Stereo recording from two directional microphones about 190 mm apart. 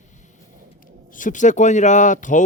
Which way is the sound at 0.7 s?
45° left (ahead or behind).